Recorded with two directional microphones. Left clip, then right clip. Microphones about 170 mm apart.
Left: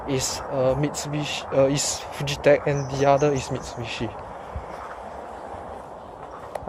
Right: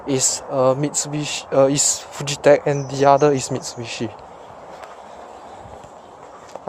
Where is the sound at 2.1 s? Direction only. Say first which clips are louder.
Right 4 dB; 40° right (ahead or behind).